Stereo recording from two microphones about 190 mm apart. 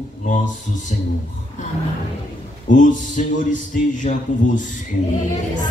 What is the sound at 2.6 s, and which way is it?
Speech, 40° left (ahead or behind).